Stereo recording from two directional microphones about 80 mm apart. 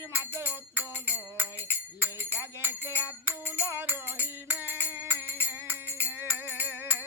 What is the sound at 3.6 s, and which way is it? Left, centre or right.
Music, right.